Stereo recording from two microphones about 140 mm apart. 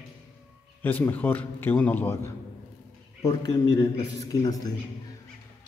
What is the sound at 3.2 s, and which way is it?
A man's voice, 25° left (ahead or behind).